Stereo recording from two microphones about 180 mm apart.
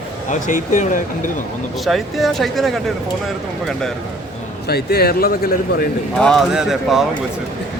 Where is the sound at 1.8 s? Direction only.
Centre (ahead or behind).